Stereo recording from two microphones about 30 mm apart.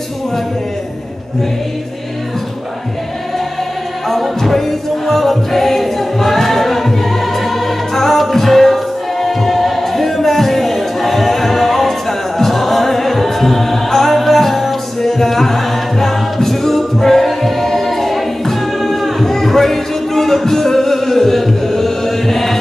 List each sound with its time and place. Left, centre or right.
4.1 s music: centre